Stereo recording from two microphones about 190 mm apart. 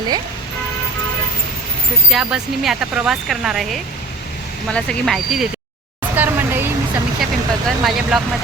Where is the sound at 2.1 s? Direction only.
Centre (ahead or behind).